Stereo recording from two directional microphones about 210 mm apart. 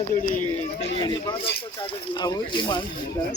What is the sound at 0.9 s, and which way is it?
Speech, 20° left (ahead or behind).